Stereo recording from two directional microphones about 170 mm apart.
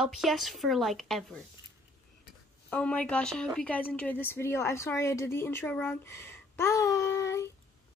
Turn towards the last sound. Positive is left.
turn(degrees=15)  # may be behind; listen again after turning